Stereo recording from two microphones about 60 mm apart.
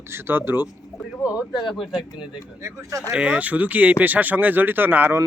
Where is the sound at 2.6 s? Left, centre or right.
Right.